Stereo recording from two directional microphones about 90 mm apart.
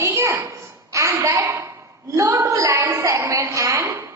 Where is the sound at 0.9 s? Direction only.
35° right (ahead or behind).